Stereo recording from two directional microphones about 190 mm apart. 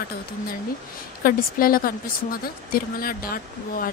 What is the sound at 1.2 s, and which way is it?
Speech, 50° left (ahead or behind).